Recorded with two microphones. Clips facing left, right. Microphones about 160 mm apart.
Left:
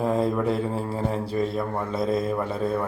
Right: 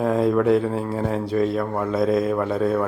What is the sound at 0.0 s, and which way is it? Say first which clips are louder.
Speech: right 4 dB; centre (ahead or behind).